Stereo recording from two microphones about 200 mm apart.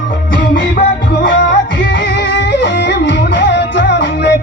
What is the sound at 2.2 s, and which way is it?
Music, 60° left (ahead or behind).